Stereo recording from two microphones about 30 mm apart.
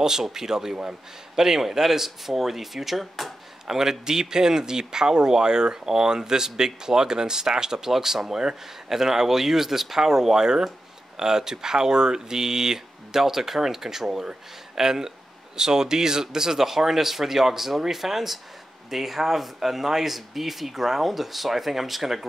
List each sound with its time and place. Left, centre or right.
0.0 s speech: centre
3.6 s speech: centre